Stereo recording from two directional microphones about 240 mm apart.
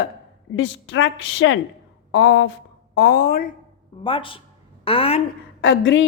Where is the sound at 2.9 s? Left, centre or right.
Left.